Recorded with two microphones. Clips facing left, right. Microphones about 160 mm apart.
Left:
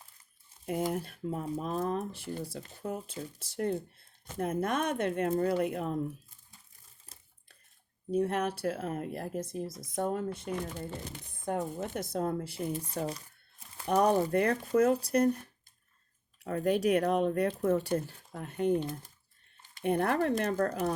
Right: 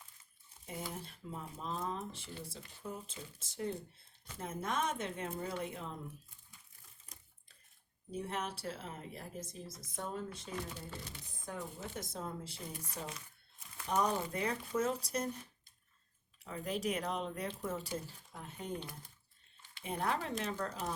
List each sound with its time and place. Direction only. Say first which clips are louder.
0.9 s speech: left 12 dB; 65° left (ahead or behind)
2.9 s speech: left 10 dB; 65° left (ahead or behind)
8.1 s speech: left 11 dB; 60° left (ahead or behind)
12.7 s speech: left 10 dB; 30° left (ahead or behind)
13.8 s speech: left 8 dB; 60° left (ahead or behind)
19.8 s speech: left 9 dB; 60° left (ahead or behind)